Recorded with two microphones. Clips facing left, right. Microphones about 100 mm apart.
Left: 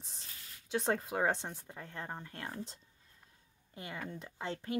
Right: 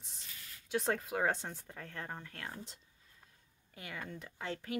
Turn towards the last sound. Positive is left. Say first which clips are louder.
# left 2 dB
turn(degrees=25)  # may be behind; listen again after turning